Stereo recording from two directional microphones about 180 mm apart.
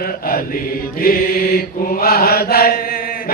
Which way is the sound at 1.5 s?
55° left (ahead or behind).